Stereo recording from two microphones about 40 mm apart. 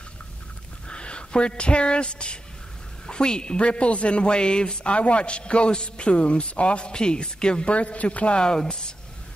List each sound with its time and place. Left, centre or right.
0.8 s a man's voice: left
7.7 s a man's voice: left